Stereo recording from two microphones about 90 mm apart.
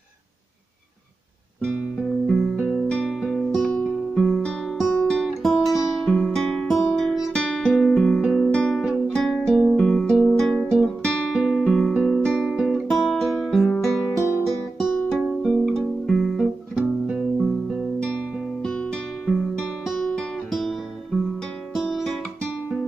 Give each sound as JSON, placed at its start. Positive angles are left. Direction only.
{"t": 2.3, "sound": "music", "side_deg": -10}
{"t": 2.9, "sound": "music", "side_deg": 10}
{"t": 3.2, "sound": "music", "side_deg": 0}
{"t": 5.0, "sound": "guitar", "side_deg": 5}
{"t": 8.5, "sound": "guitar", "side_deg": 10}
{"t": 9.1, "sound": "music", "side_deg": 5}
{"t": 12.4, "sound": "guitar", "side_deg": -5}
{"t": 13.1, "sound": "music", "side_deg": 0}
{"t": 14.1, "sound": "music", "side_deg": 30}
{"t": 15.0, "sound": "music", "side_deg": 10}
{"t": 18.0, "sound": "music", "side_deg": 10}